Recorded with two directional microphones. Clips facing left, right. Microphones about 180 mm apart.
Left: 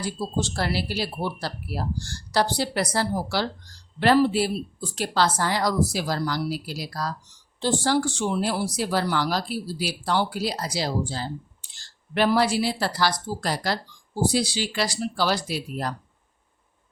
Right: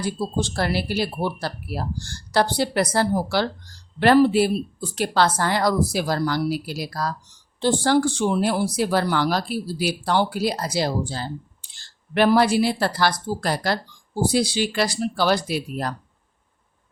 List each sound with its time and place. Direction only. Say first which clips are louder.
0.0 s speech: right 3 dB; 55° right (ahead or behind)